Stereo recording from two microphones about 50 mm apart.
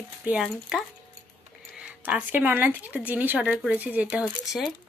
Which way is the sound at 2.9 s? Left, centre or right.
Right.